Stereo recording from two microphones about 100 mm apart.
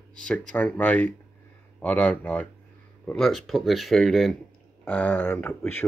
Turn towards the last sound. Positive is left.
turn(degrees=15)  # may be behind; listen again after turning